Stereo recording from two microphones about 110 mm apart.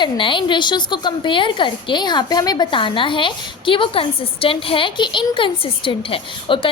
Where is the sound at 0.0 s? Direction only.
50° left (ahead or behind).